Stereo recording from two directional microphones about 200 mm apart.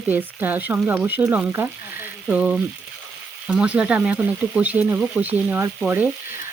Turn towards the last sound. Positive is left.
turn(degrees=-10)  # may be behind; listen again after turning